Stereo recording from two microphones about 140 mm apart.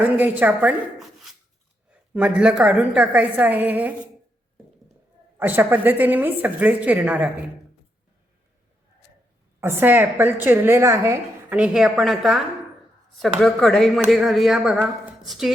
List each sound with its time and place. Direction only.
0.0 s a woman's voice: 10° right (ahead or behind)
5.4 s a woman's voice: 15° right (ahead or behind)
9.6 s a woman's voice: 15° right (ahead or behind)
11.5 s speech: 5° right (ahead or behind)